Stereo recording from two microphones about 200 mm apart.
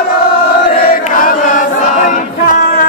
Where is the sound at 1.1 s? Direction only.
45° left (ahead or behind).